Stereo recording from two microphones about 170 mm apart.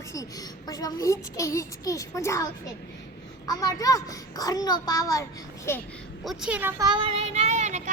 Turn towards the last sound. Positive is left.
turn(degrees=-45)  # may be behind; listen again after turning